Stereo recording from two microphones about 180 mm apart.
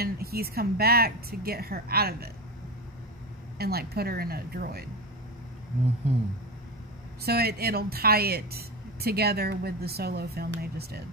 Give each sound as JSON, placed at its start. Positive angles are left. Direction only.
{"t": 0.0, "sound": "speech", "side_deg": -55}
{"t": 3.5, "sound": "speech", "side_deg": -60}
{"t": 7.2, "sound": "speech", "side_deg": -60}